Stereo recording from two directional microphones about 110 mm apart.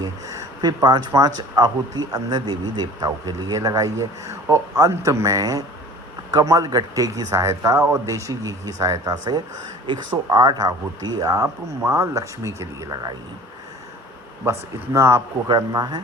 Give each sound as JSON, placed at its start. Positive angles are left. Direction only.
{"t": 0.0, "sound": "speech", "side_deg": -30}
{"t": 14.9, "sound": "speech", "side_deg": -25}
{"t": 15.4, "sound": "speech", "side_deg": -35}